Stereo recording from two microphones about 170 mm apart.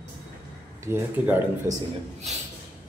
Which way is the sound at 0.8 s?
10° right (ahead or behind).